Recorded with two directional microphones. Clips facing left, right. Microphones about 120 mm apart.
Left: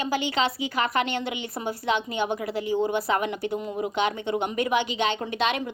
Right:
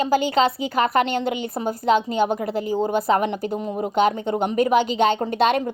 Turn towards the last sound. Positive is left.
turn(degrees=-45)  # may be behind; listen again after turning